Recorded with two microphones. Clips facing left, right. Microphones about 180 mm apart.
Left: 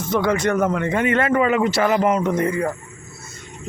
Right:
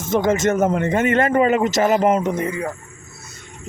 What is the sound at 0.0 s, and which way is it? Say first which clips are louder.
Speech: right 1 dB; 45° right (ahead or behind).